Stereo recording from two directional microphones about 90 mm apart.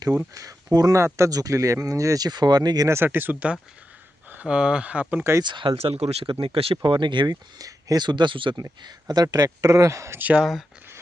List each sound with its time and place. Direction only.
0.3 s speech: 40° right (ahead or behind)
1.0 s speech: 30° right (ahead or behind)
2.9 s speech: 25° right (ahead or behind)
5.4 s speech: 60° right (ahead or behind)
7.6 s speech: 40° right (ahead or behind)
8.0 s speech: 60° right (ahead or behind)
8.8 s speech: 50° right (ahead or behind)
10.2 s speech: 15° right (ahead or behind)